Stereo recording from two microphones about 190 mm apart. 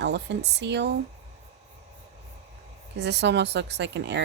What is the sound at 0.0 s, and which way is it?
Speech, 65° right (ahead or behind).